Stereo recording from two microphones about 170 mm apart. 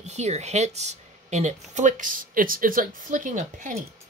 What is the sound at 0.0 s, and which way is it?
Speech, 40° right (ahead or behind).